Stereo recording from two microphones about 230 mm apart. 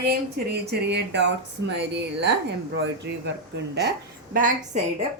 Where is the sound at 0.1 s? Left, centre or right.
Right.